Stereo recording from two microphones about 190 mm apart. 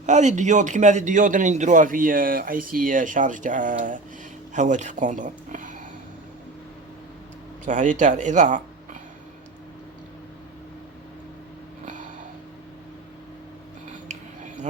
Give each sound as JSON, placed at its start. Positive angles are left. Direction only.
{"t": 0.0, "sound": "a man's voice", "side_deg": -40}
{"t": 7.6, "sound": "speech", "side_deg": -40}